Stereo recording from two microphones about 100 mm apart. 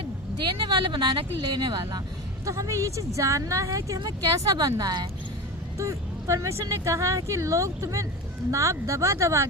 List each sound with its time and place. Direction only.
0.4 s speech: 45° right (ahead or behind)
2.4 s speech: 35° right (ahead or behind)
5.7 s speech: 30° right (ahead or behind)